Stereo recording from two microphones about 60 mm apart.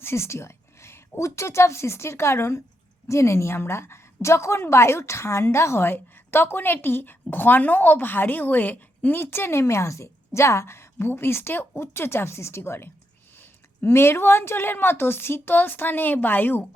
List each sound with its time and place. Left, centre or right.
0.0 s a woman's voice: left